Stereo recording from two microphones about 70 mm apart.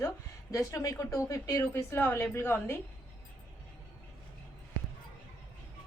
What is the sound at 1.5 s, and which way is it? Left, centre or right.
A woman's voice, left.